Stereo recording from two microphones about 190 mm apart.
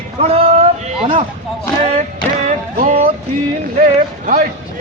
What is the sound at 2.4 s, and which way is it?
Music, 35° right (ahead or behind).